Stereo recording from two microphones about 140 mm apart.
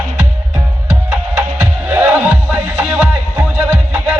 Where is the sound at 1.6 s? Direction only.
15° right (ahead or behind).